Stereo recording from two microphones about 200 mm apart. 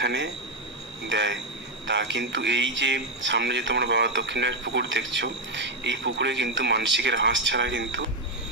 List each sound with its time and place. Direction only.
0.0 s speech: 60° right (ahead or behind)